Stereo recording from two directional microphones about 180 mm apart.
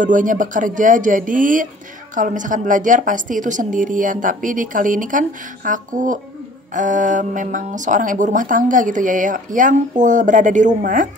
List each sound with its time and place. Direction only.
0.0 s speech: 45° right (ahead or behind)